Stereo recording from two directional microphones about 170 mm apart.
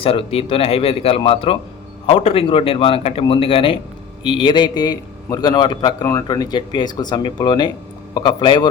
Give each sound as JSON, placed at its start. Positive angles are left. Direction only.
{"t": 0.0, "sound": "a man's voice", "side_deg": 35}